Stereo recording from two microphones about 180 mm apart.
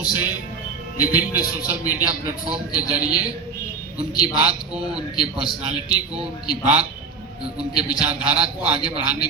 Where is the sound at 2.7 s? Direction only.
20° left (ahead or behind).